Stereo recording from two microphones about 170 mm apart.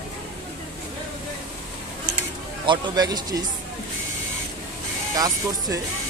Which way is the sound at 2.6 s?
25° right (ahead or behind).